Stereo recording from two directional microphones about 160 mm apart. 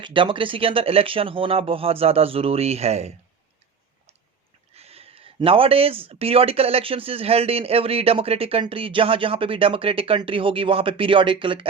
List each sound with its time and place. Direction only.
0.0 s speech: 30° right (ahead or behind)
4.7 s speech: 40° right (ahead or behind)